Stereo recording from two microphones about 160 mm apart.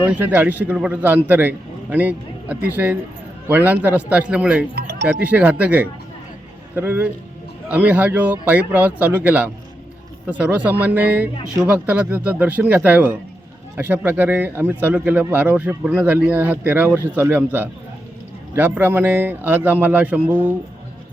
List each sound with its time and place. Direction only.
0.0 s speech: 10° right (ahead or behind)
4.7 s music: 90° right
5.2 s speech: 10° right (ahead or behind)